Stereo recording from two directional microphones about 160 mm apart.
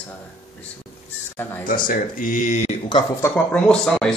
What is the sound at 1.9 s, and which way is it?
Speech, 55° left (ahead or behind).